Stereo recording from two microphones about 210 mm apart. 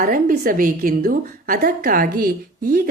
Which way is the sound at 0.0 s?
40° right (ahead or behind).